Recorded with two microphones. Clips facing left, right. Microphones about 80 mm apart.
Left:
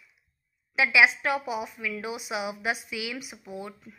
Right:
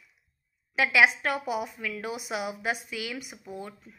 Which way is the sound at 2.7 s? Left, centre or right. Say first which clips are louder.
Left 1 dB; right.